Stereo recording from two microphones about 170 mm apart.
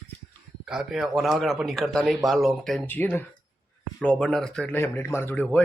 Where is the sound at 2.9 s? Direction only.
10° left (ahead or behind).